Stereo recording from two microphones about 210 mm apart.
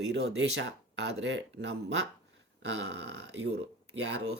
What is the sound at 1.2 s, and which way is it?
Speech, 60° right (ahead or behind).